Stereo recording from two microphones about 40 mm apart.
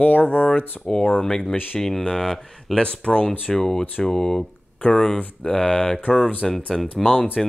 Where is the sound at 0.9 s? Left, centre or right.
Centre.